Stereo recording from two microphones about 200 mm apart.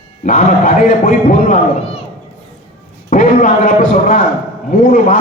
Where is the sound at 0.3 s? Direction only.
45° left (ahead or behind).